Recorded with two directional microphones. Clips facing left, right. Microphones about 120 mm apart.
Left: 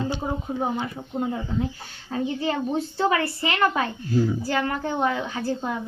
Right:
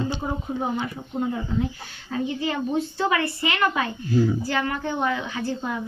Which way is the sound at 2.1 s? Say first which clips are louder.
Left 1 dB; 30° left (ahead or behind).